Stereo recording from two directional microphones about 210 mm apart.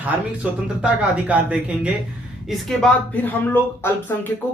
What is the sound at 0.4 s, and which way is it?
Speech, 5° right (ahead or behind).